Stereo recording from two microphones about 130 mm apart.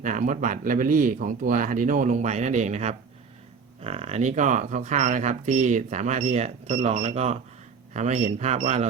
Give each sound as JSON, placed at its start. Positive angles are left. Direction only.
{"t": 0.0, "sound": "speech", "side_deg": -85}